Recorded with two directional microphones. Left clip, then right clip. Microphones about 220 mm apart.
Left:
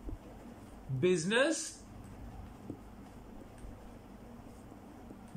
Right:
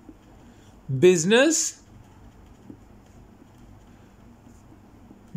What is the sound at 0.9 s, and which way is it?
Speech, 50° right (ahead or behind).